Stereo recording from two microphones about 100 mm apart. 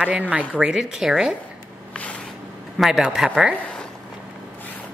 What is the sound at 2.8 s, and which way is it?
Speech, 5° right (ahead or behind).